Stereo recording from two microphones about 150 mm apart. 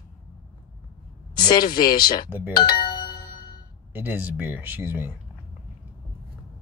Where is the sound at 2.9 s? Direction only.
30° left (ahead or behind).